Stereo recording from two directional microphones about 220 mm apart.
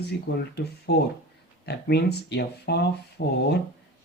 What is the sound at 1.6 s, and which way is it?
Speech, 50° left (ahead or behind).